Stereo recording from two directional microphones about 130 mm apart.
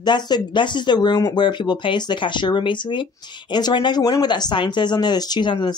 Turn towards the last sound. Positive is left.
turn(degrees=35)  # may be behind; listen again after turning